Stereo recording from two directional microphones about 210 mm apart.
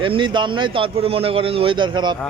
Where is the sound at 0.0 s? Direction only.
25° right (ahead or behind).